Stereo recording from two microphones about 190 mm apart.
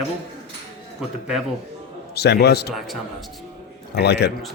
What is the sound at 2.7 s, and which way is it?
Speech, centre (ahead or behind).